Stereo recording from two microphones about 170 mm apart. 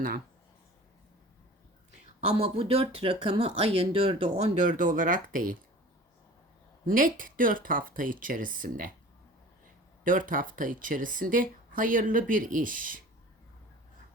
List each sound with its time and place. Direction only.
2.2 s speech: 35° right (ahead or behind); by 5.5 s 55° right (ahead or behind)
6.8 s speech: 55° right (ahead or behind)
10.0 s speech: 55° right (ahead or behind)